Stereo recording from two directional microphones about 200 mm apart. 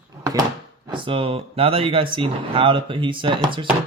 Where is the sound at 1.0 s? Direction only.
25° right (ahead or behind).